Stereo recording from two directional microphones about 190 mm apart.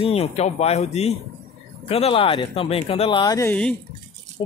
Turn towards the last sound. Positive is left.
turn(degrees=10)  # may be behind; listen again after turning